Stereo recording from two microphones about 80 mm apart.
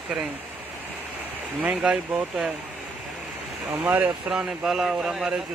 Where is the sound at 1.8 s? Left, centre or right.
Centre.